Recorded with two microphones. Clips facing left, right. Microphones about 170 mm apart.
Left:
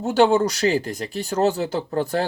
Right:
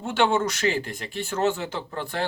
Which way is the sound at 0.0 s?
40° left (ahead or behind).